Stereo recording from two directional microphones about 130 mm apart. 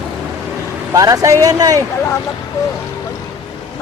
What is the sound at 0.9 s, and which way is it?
Speech, 25° right (ahead or behind).